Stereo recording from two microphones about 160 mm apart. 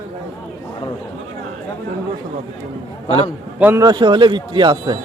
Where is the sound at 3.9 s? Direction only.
30° right (ahead or behind).